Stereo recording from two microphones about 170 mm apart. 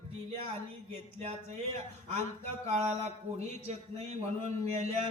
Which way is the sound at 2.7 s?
40° right (ahead or behind).